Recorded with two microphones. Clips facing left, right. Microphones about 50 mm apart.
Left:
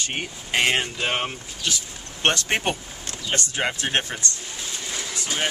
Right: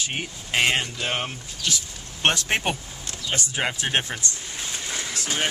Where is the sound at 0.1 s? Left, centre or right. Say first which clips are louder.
Left 3 dB; centre.